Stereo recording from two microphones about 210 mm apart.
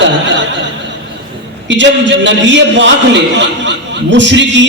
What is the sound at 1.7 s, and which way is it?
A man's voice, 60° right (ahead or behind).